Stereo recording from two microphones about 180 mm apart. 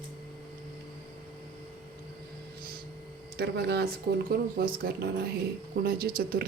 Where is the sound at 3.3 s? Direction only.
65° right (ahead or behind).